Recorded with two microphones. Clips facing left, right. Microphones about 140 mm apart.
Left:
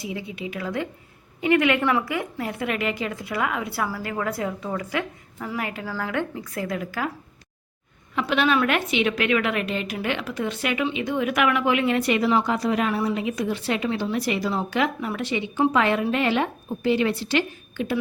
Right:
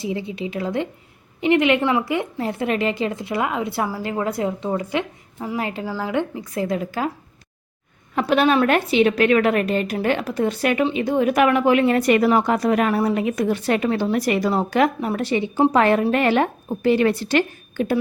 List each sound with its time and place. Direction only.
0.0 s a woman's voice: 30° right (ahead or behind)
8.1 s a woman's voice: 40° right (ahead or behind)